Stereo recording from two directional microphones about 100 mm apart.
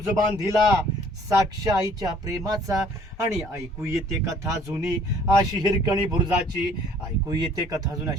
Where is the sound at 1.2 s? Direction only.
35° right (ahead or behind).